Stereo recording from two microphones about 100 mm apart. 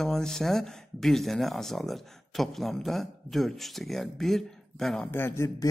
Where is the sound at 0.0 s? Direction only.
5° left (ahead or behind).